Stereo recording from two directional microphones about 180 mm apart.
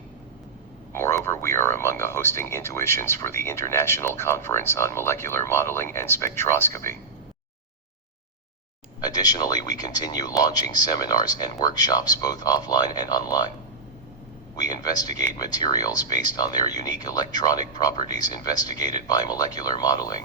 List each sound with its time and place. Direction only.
0.9 s speech: 15° left (ahead or behind)
9.0 s speech: 20° left (ahead or behind)
14.5 s speech: 20° left (ahead or behind)